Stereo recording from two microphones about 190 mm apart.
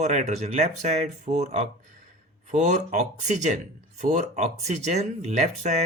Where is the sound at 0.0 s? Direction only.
40° right (ahead or behind).